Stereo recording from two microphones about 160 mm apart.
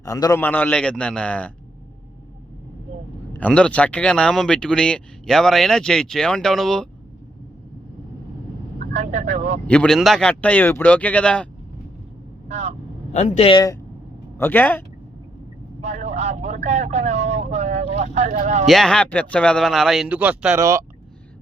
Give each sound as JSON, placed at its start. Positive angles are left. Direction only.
{"t": 0.0, "sound": "a man's voice", "side_deg": 20}
{"t": 0.4, "sound": "speech", "side_deg": 10}
{"t": 3.3, "sound": "speech", "side_deg": 10}
{"t": 8.9, "sound": "vehicle", "side_deg": -50}
{"t": 9.6, "sound": "speech", "side_deg": 5}
{"t": 12.5, "sound": "vehicle", "side_deg": -45}
{"t": 13.1, "sound": "speech", "side_deg": 45}
{"t": 13.5, "sound": "a man's voice", "side_deg": 25}
{"t": 14.3, "sound": "speech", "side_deg": 15}
{"t": 15.8, "sound": "vehicle", "side_deg": -45}
{"t": 18.6, "sound": "speech", "side_deg": 0}